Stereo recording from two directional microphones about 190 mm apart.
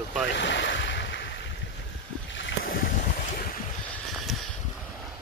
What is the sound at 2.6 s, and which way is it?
Boat, 45° left (ahead or behind).